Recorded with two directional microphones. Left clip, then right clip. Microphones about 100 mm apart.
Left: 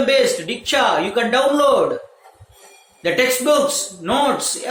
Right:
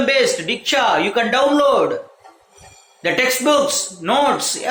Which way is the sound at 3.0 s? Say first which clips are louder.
Even; 25° right (ahead or behind).